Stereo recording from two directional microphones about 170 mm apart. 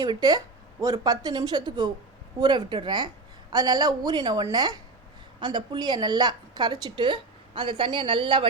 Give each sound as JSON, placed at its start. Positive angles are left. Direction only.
{"t": 0.0, "sound": "a woman's voice", "side_deg": -25}